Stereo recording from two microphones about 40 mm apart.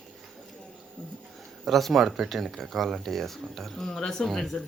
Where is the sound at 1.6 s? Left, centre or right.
Centre.